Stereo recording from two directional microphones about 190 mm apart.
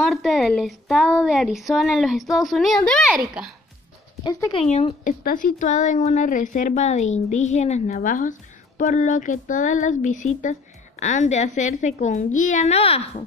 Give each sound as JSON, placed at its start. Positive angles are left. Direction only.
{"t": 0.0, "sound": "speech", "side_deg": 0}
{"t": 4.2, "sound": "speech", "side_deg": 20}
{"t": 4.6, "sound": "speech", "side_deg": 35}